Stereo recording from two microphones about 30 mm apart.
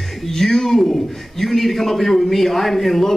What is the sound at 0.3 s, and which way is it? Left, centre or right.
A man's voice, centre.